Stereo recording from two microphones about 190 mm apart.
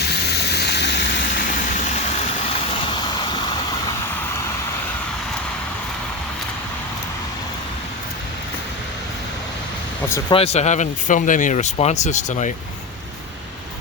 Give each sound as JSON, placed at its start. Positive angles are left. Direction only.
{"t": 0.0, "sound": "a sound", "side_deg": 60}
{"t": 1.4, "sound": "vehicle", "side_deg": 40}
{"t": 10.3, "sound": "speech", "side_deg": 35}